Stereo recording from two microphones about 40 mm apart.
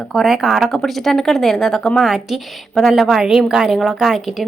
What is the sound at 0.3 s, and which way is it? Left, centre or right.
Speech, centre.